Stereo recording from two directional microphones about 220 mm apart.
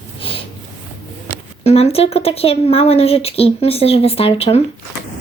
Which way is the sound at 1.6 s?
30° left (ahead or behind).